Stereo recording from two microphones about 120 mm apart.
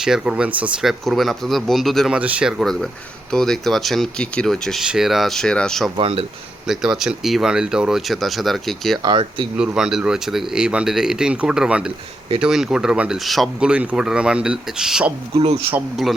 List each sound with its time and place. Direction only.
0.0 s speech: 5° right (ahead or behind)
2.1 s speech: 10° right (ahead or behind)
6.0 s speech: 50° right (ahead or behind)
6.7 s speech: 5° right (ahead or behind)
9.0 s speech: 45° right (ahead or behind)
9.6 s speech: 5° right (ahead or behind)